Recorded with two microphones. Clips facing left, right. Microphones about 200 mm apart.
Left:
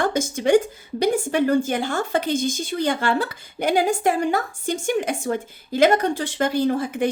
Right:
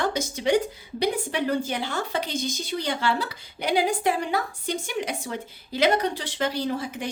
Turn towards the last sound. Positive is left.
turn(degrees=50)  # may be behind; listen again after turning